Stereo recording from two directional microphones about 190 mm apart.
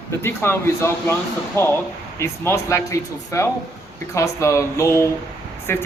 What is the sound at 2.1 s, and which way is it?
Speech, 15° left (ahead or behind).